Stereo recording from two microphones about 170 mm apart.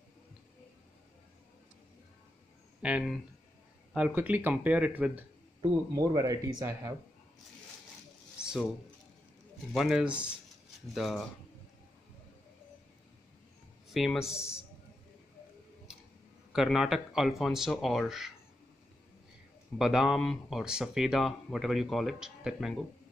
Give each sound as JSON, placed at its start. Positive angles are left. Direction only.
{"t": 2.8, "sound": "speech", "side_deg": -5}
{"t": 5.9, "sound": "speech", "side_deg": -20}
{"t": 8.4, "sound": "a sound", "side_deg": -5}
{"t": 9.8, "sound": "speech", "side_deg": 0}
{"t": 13.8, "sound": "speech", "side_deg": 0}
{"t": 16.5, "sound": "speech", "side_deg": 0}
{"t": 19.8, "sound": "speech", "side_deg": -5}